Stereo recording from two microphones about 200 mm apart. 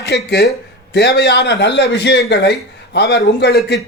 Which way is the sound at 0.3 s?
55° left (ahead or behind).